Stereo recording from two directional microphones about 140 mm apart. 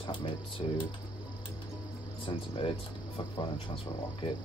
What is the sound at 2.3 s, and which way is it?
Speech, 40° left (ahead or behind).